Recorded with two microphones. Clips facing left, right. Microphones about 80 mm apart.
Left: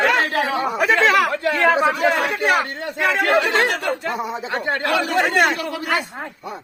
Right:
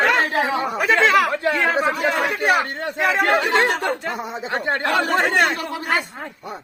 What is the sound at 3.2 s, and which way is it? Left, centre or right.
Speech, right.